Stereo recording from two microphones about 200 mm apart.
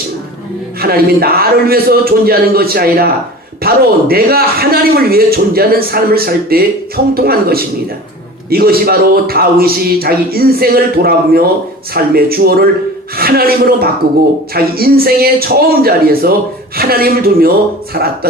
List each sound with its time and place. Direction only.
0.8 s a man's voice: 50° right (ahead or behind)